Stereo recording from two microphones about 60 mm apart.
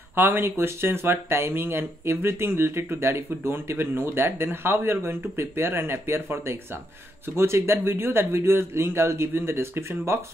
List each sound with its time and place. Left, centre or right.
0.1 s speech: right